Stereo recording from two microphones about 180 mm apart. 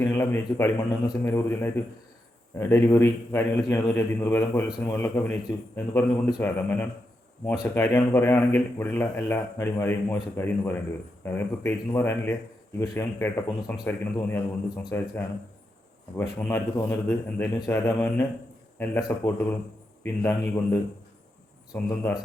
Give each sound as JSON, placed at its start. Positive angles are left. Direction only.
{"t": 0.0, "sound": "a man's voice", "side_deg": 15}
{"t": 21.7, "sound": "speech", "side_deg": 20}